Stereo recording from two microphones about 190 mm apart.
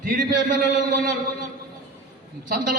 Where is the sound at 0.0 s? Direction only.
45° right (ahead or behind).